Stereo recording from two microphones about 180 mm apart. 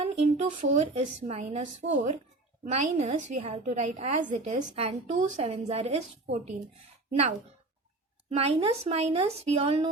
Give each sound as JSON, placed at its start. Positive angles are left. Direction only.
{"t": 0.0, "sound": "a woman's voice", "side_deg": -35}